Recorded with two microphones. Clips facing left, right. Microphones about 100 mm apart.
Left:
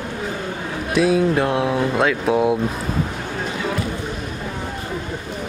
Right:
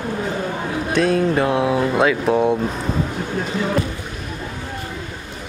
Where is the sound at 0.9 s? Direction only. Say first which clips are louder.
Left 1 dB; 5° left (ahead or behind).